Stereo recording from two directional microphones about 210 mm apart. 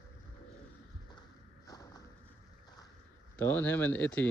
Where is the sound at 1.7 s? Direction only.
20° left (ahead or behind).